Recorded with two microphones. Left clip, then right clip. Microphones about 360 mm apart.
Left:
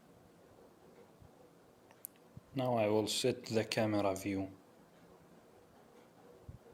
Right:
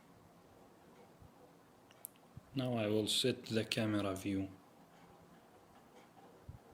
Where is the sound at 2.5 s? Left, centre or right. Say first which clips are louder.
Left 4 dB; centre.